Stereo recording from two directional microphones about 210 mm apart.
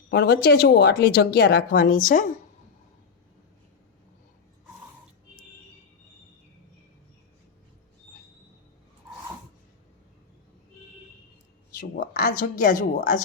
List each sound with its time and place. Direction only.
0.1 s a woman's voice: 50° left (ahead or behind)
11.8 s speech: 50° left (ahead or behind)